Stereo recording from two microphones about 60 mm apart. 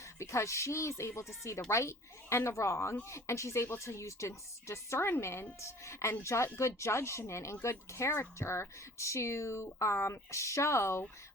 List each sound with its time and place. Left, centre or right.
0.2 s speech: left